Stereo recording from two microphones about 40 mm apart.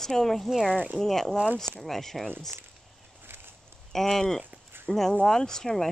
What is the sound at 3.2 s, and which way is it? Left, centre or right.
Walk, right.